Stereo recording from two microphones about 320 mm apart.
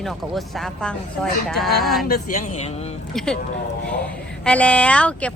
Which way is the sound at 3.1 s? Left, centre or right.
Centre.